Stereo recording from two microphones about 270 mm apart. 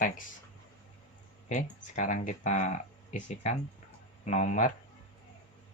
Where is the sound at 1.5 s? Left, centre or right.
Left.